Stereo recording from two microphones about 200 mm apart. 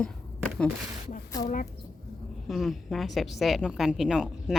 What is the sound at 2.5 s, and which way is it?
A woman's voice, centre (ahead or behind).